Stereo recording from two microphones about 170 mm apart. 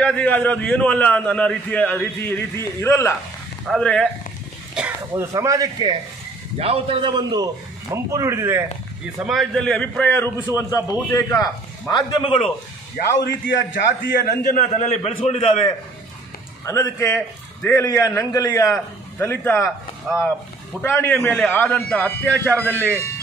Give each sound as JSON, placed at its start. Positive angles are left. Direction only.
{"t": 0.0, "sound": "a man's voice", "side_deg": 10}
{"t": 3.6, "sound": "speech", "side_deg": 0}
{"t": 4.7, "sound": "speech", "side_deg": -10}
{"t": 6.6, "sound": "a man's voice", "side_deg": -35}
{"t": 9.2, "sound": "a man's voice", "side_deg": 0}
{"t": 13.2, "sound": "a man's voice", "side_deg": 90}
{"t": 14.5, "sound": "a man's voice", "side_deg": 45}
{"t": 16.6, "sound": "a man's voice", "side_deg": 15}
{"t": 20.8, "sound": "a man's voice", "side_deg": 10}